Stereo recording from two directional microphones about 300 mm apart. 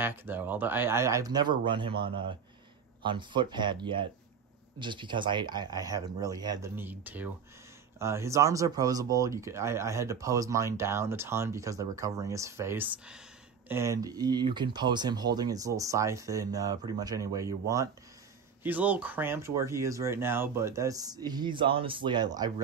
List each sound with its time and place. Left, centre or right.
0.0 s speech: centre